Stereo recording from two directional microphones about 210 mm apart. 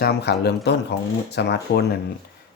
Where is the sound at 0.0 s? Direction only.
50° left (ahead or behind).